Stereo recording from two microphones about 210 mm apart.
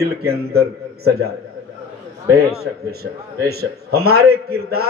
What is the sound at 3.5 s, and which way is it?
A man's voice, 50° right (ahead or behind).